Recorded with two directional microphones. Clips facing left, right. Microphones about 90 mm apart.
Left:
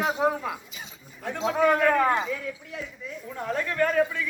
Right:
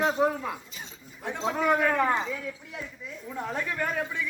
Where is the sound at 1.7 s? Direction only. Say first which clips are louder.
Left 1 dB; 15° right (ahead or behind).